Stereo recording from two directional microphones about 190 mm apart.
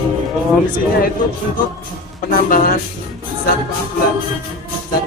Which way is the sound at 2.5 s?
45° left (ahead or behind).